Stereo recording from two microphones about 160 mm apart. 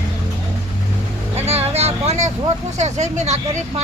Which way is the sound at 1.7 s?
40° right (ahead or behind).